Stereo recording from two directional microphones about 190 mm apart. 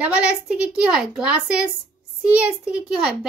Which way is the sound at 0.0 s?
5° right (ahead or behind).